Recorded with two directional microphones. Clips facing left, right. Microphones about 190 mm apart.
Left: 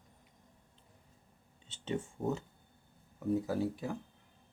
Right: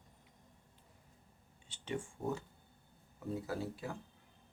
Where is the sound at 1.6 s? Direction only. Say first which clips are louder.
Left 4 dB; 25° left (ahead or behind).